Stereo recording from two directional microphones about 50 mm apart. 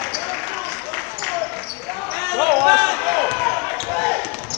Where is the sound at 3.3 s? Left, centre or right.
Centre.